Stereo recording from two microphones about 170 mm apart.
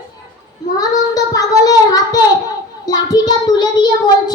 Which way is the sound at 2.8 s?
20° left (ahead or behind).